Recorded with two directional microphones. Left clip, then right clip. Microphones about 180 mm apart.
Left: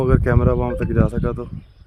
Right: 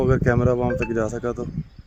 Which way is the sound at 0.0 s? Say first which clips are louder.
Left 1 dB; 5° left (ahead or behind).